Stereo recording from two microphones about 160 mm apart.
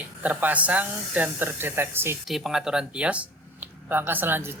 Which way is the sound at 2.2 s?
Centre (ahead or behind).